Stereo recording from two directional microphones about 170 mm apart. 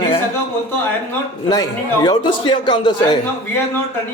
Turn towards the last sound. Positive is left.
turn(degrees=25)  # may be behind; listen again after turning